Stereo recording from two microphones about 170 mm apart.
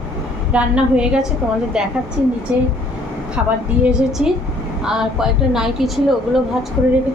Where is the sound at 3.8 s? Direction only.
5° right (ahead or behind).